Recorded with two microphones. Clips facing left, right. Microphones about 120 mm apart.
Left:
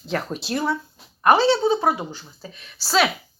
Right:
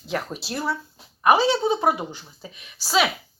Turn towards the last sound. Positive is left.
turn(degrees=-10)  # may be behind; listen again after turning